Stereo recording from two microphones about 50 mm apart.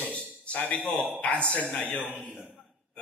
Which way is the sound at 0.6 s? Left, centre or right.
Left.